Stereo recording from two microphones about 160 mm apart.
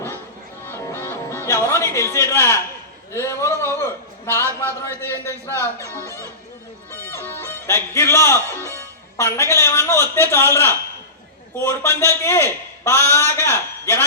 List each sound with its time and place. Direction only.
0.6 s music: 15° left (ahead or behind)
3.1 s a man's voice: 15° left (ahead or behind)
6.9 s music: 15° left (ahead or behind)
8.7 s a man's voice: 20° left (ahead or behind)